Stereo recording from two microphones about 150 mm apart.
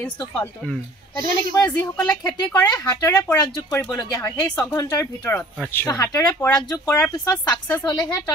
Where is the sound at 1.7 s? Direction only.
25° left (ahead or behind).